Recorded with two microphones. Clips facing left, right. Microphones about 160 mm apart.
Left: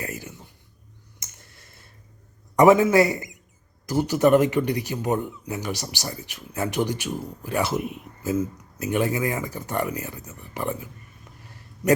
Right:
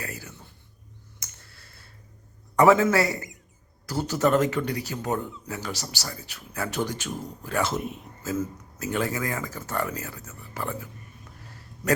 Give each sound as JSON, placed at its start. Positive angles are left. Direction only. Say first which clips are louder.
{"t": 0.0, "sound": "a sound", "louder": "left 4 dB", "side_deg": 20}
{"t": 1.2, "sound": "clicking", "louder": "left 4 dB", "side_deg": 20}
{"t": 2.6, "sound": "a man's voice", "louder": "left 3 dB", "side_deg": 15}